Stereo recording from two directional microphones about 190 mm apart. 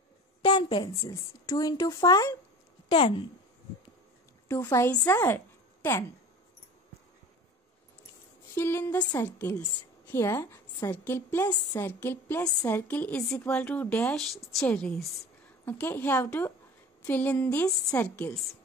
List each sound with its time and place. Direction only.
0.4 s a woman's voice: 25° left (ahead or behind)
4.5 s a woman's voice: 10° left (ahead or behind)
8.5 s a woman's voice: 15° left (ahead or behind)